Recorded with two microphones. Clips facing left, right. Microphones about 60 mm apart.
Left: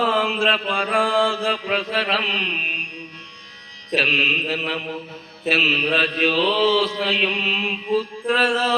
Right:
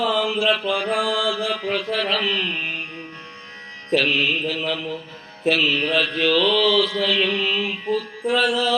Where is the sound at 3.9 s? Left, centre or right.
Left.